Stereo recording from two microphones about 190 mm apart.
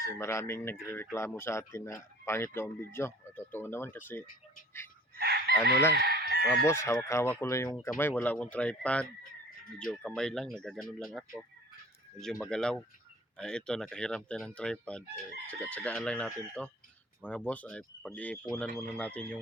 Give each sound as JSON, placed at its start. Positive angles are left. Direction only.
{"t": 0.0, "sound": "speech", "side_deg": 15}
{"t": 5.1, "sound": "chicken", "side_deg": -60}
{"t": 6.7, "sound": "speech", "side_deg": 15}